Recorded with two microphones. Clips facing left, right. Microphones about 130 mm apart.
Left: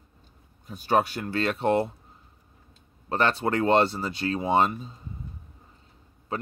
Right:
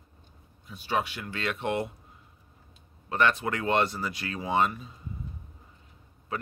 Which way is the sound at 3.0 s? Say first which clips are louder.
Left 2 dB; 35° left (ahead or behind).